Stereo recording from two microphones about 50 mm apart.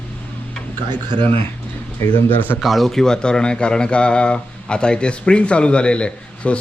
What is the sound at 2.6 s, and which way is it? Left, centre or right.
Speech, centre.